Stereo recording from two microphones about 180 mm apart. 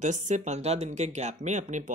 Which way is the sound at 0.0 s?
40° right (ahead or behind).